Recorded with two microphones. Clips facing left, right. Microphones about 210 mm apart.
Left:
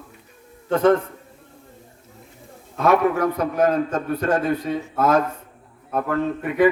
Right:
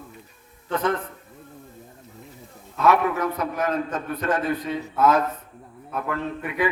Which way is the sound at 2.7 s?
50° left (ahead or behind).